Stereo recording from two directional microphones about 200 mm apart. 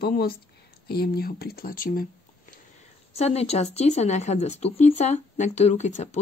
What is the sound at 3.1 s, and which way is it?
Speech, 30° left (ahead or behind).